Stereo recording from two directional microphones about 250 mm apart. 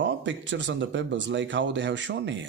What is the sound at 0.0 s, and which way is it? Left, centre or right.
Speech, right.